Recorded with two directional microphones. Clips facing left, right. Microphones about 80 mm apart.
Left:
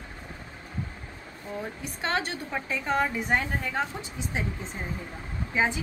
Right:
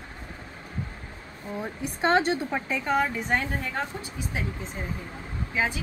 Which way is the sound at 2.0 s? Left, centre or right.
Right.